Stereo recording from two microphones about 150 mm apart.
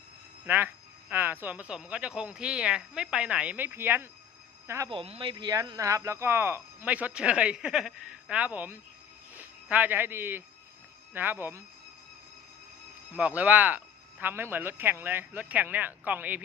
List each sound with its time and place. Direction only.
0.4 s speech: 15° right (ahead or behind)
4.9 s speech: 40° right (ahead or behind); by 11.6 s 15° right (ahead or behind)
13.1 s speech: 10° right (ahead or behind)